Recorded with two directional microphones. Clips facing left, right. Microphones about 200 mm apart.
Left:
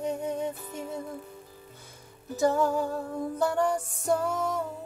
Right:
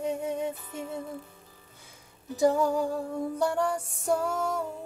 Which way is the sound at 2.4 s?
15° right (ahead or behind).